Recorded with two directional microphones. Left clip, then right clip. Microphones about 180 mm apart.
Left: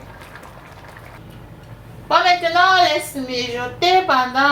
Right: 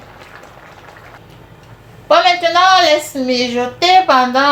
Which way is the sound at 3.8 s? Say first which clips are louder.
Right 5 dB; 60° right (ahead or behind).